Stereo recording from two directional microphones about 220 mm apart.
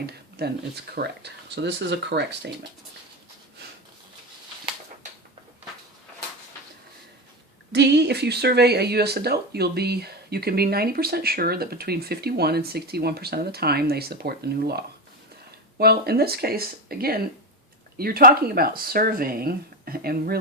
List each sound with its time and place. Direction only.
0.0 s speech: 45° right (ahead or behind)
7.7 s speech: 50° right (ahead or behind)